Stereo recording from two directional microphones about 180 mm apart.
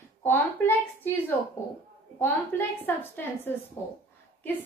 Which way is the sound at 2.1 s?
10° left (ahead or behind).